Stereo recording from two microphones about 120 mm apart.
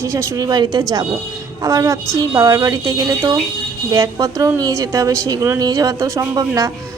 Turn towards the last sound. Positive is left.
turn(degrees=-25)  # may be behind; listen again after turning